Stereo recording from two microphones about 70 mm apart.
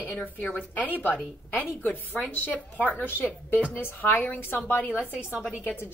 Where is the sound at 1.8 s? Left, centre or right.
Left.